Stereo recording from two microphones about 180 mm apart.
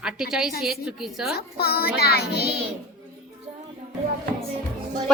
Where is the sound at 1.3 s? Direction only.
60° left (ahead or behind).